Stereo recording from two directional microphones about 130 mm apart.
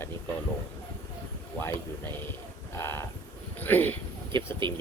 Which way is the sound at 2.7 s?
20° left (ahead or behind).